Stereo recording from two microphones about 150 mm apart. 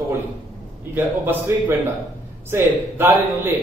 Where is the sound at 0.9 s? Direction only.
15° right (ahead or behind).